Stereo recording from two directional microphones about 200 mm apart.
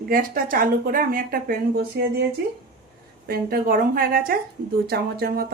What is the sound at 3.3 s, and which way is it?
Speech, 45° right (ahead or behind).